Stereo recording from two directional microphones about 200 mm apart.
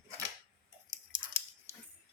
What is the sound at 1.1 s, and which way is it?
Dog, 25° right (ahead or behind).